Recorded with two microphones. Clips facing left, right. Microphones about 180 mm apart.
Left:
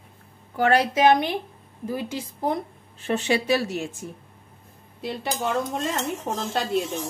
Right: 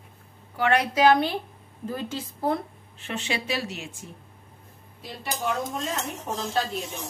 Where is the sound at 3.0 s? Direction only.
40° left (ahead or behind).